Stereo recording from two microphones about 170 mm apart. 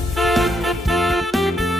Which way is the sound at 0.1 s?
Centre (ahead or behind).